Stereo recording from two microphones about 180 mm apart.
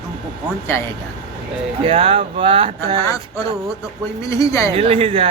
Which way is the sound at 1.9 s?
30° right (ahead or behind).